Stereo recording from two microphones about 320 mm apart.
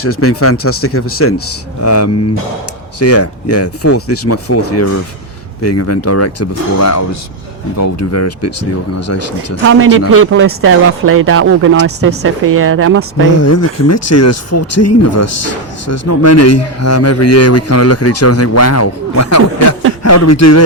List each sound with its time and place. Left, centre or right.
0.0 s a man's voice: left
9.6 s speech: right
13.4 s a man's voice: left